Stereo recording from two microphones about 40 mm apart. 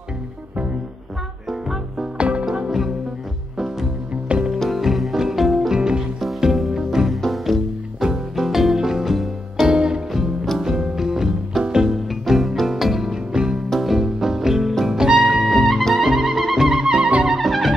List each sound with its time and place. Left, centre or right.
1.5 s music: centre
2.1 s music: right
3.5 s music: centre
4.1 s music: right
4.6 s music: centre
5.7 s music: centre
7.2 s music: centre
8.0 s music: centre
9.7 s music: right
10.6 s music: centre
12.1 s music: centre
13.7 s music: centre
15.1 s music: centre
17.3 s music: centre